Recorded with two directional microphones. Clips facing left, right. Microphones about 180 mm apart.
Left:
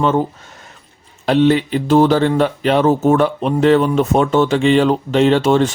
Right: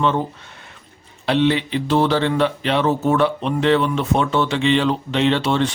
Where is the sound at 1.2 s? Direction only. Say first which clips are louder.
Left 5 dB; 45° left (ahead or behind).